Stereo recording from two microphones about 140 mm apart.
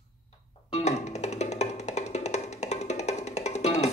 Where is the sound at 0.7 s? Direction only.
50° left (ahead or behind).